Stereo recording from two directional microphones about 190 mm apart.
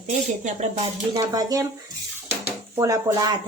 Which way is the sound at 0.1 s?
40° right (ahead or behind).